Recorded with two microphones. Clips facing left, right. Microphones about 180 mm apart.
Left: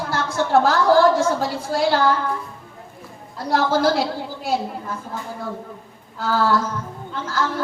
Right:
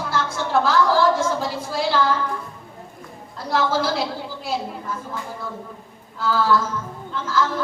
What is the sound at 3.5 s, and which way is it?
Speech, 45° left (ahead or behind).